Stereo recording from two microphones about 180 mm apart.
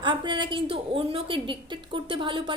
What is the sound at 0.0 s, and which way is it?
A woman's voice, 25° right (ahead or behind).